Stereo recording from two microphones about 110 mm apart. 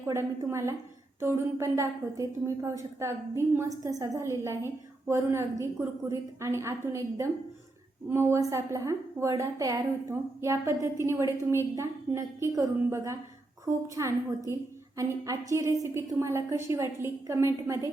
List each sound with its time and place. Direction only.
0.0 s a woman's voice: 25° right (ahead or behind)